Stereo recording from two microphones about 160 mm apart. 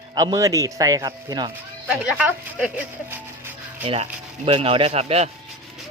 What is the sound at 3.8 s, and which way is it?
Speech, 35° right (ahead or behind).